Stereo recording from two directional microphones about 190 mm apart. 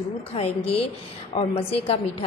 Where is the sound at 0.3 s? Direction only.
30° left (ahead or behind).